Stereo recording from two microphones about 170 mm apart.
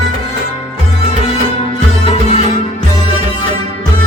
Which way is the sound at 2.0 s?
40° left (ahead or behind).